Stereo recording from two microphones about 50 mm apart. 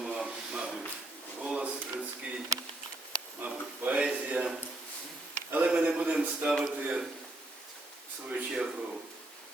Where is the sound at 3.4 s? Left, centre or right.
Right.